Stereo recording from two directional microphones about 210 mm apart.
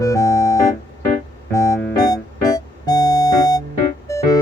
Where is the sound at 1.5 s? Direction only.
15° left (ahead or behind).